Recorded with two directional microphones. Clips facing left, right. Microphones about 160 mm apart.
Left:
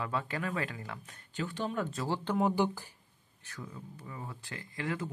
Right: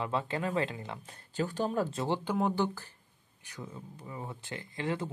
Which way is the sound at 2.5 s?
10° left (ahead or behind).